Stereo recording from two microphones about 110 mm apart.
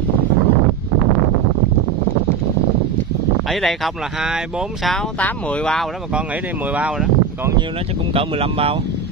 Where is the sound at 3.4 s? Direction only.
Centre (ahead or behind).